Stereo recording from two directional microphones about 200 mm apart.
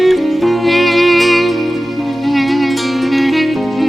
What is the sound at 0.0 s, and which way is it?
Music, centre (ahead or behind).